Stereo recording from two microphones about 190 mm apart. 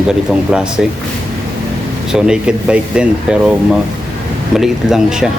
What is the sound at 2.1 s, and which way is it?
Speech, 5° right (ahead or behind).